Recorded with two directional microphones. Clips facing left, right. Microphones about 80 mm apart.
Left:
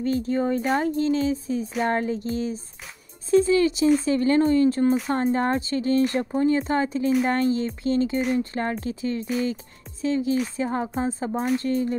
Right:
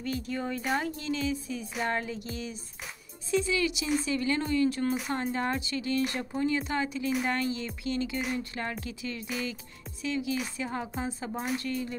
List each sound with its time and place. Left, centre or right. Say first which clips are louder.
0.0 s speech: left 10 dB; left